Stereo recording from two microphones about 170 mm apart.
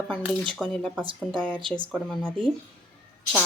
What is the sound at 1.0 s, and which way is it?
Speech, 30° right (ahead or behind).